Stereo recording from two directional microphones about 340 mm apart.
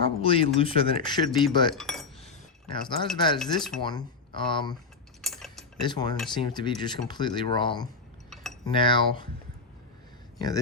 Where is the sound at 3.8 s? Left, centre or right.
Centre.